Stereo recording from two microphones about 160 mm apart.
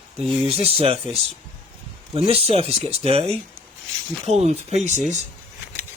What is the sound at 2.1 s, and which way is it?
Speech, 40° right (ahead or behind).